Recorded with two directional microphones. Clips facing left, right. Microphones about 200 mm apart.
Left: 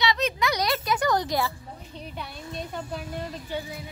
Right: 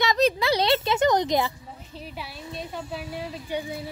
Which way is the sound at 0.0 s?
45° right (ahead or behind).